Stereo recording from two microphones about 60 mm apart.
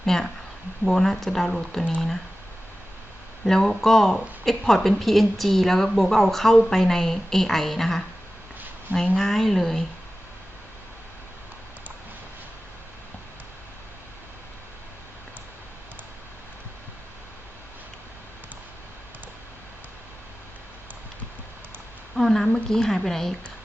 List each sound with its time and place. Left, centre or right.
0.0 s speech: centre
3.4 s speech: centre
9.1 s speech: centre
22.1 s a woman's voice: centre